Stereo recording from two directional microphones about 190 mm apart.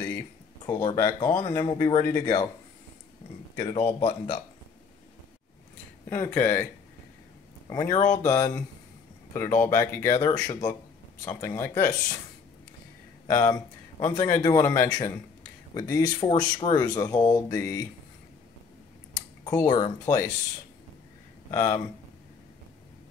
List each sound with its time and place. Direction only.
0.7 s speech: 15° left (ahead or behind)
4.0 s speech: 35° left (ahead or behind)
6.0 s speech: 10° left (ahead or behind)
7.7 s speech: 15° left (ahead or behind)
13.3 s speech: 15° left (ahead or behind)
19.4 s speech: 20° left (ahead or behind)
21.5 s speech: 15° left (ahead or behind)